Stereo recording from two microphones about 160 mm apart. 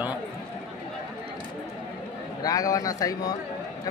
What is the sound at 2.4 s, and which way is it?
Speech, 20° left (ahead or behind).